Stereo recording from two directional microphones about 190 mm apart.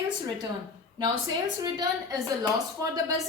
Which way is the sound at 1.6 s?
20° right (ahead or behind).